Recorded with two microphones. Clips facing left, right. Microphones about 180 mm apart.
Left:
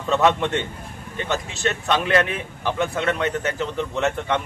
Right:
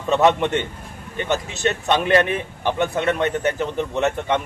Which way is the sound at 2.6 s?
20° right (ahead or behind).